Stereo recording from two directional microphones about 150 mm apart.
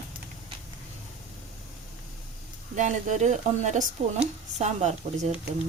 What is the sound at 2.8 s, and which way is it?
Speech, 55° right (ahead or behind).